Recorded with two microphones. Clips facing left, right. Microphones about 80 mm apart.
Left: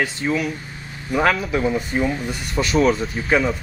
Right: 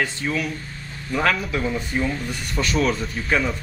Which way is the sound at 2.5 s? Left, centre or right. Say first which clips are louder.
Left 4 dB; centre.